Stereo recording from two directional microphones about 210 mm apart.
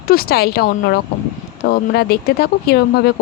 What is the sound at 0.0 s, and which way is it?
Speech, 45° left (ahead or behind).